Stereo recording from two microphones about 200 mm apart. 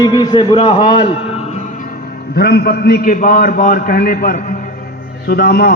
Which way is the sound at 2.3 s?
55° left (ahead or behind).